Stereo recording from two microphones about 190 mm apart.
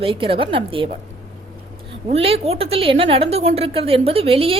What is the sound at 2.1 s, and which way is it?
A woman's voice, 30° right (ahead or behind).